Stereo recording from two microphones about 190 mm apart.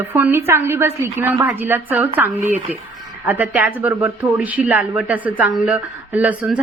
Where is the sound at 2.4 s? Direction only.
40° right (ahead or behind).